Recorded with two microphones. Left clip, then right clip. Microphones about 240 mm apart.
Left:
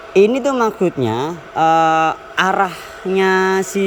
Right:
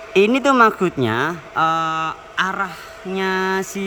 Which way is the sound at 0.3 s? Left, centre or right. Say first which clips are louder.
Right 2 dB; centre.